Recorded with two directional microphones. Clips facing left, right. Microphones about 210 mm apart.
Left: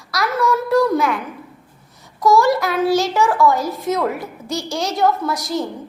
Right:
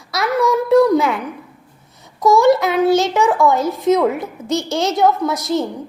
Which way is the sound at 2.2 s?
20° right (ahead or behind).